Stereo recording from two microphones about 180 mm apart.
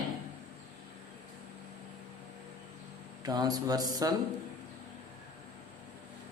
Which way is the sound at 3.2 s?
20° right (ahead or behind).